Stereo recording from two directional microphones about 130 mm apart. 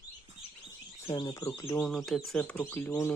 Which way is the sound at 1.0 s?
35° left (ahead or behind).